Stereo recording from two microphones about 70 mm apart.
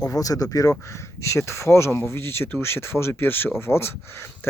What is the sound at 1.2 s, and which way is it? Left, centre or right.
Speech, left.